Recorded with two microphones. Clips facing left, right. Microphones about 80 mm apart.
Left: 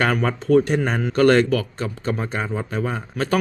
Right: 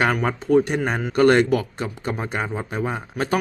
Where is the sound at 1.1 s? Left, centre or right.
Centre.